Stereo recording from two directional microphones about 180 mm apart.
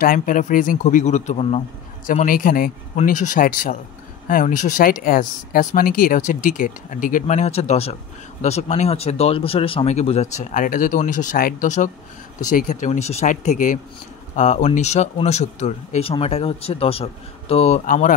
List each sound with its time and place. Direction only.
0.0 s speech: 50° left (ahead or behind)
2.0 s speech: 50° left (ahead or behind)